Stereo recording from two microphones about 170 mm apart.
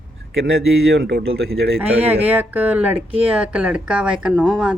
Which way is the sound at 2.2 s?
10° right (ahead or behind).